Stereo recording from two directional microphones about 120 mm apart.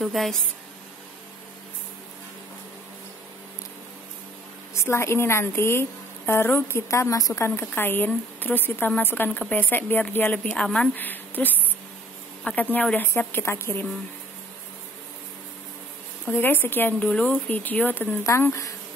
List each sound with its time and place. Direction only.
0.0 s speech: centre (ahead or behind)
4.7 s a woman's voice: 20° left (ahead or behind)
12.7 s speech: 15° left (ahead or behind)
16.3 s speech: 15° left (ahead or behind)